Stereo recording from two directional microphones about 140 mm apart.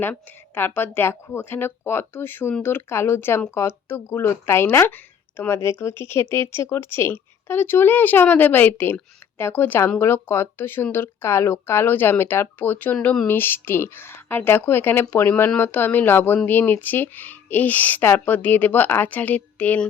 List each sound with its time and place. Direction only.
0.0 s speech: 15° left (ahead or behind)
6.0 s speech: 20° left (ahead or behind)